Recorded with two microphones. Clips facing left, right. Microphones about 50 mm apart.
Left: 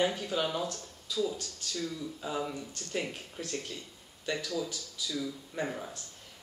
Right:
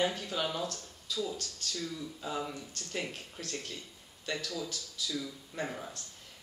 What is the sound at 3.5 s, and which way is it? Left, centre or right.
Speech, centre.